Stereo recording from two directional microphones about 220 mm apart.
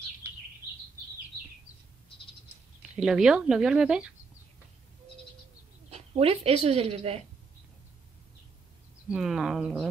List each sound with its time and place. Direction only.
3.0 s speech: 5° right (ahead or behind)
5.9 s a woman's voice: 30° right (ahead or behind)
9.1 s speech: centre (ahead or behind)